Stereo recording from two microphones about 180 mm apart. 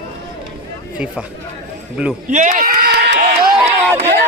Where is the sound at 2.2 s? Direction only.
45° right (ahead or behind); by 3.5 s 65° right (ahead or behind).